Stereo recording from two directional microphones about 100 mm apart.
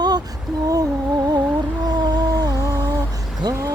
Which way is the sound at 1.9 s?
45° right (ahead or behind).